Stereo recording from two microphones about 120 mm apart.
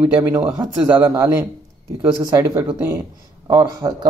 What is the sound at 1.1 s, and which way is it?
Speech, 25° right (ahead or behind).